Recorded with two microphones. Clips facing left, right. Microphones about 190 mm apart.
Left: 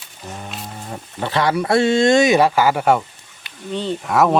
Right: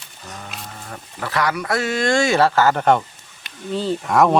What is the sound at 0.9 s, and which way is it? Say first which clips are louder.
Speech: left 4 dB; 25° left (ahead or behind).